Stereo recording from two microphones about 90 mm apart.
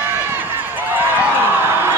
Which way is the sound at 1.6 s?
25° right (ahead or behind).